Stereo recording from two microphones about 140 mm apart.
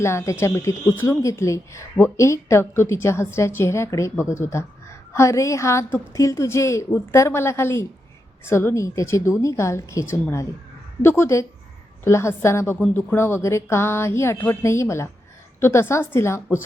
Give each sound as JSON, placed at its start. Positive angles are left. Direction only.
{"t": 0.0, "sound": "a woman's voice", "side_deg": 20}